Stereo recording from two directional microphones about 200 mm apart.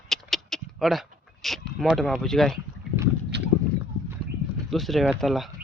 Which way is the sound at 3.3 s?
60° right (ahead or behind).